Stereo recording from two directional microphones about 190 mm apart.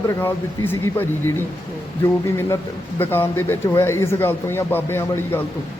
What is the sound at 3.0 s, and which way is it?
Speech, 10° left (ahead or behind).